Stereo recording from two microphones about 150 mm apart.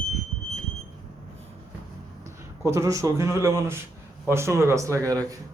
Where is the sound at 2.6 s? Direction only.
20° right (ahead or behind).